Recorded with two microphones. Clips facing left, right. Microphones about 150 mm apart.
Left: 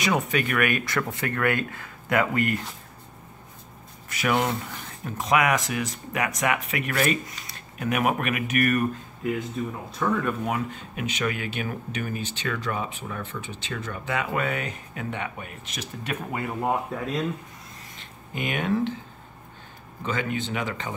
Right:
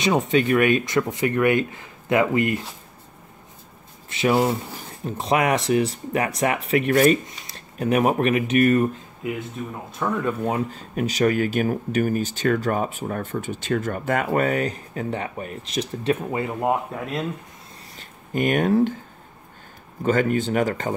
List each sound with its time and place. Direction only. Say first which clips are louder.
0.0 s speech: right 5 dB; 25° right (ahead or behind)
4.1 s speech: right 5 dB; 30° right (ahead or behind)
9.6 s speech: left 2 dB; 5° right (ahead or behind)
10.2 s speech: right 3 dB; 30° right (ahead or behind)
17.9 s speech: right 10 dB; 45° right (ahead or behind)
20.0 s speech: right 8 dB; 45° right (ahead or behind)